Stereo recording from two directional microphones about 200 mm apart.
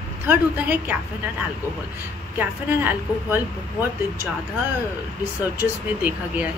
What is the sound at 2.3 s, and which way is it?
A woman's voice, 10° right (ahead or behind).